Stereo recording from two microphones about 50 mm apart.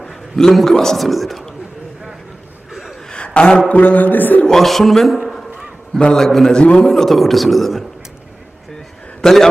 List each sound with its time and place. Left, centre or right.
0.0 s a man's voice: centre
3.1 s a sound: left
3.7 s a man's voice: left
4.4 s speech: centre
6.0 s a man's voice: centre
6.2 s a man's voice: centre
6.6 s a man's voice: centre
6.9 s speech: centre
9.2 s a man's voice: centre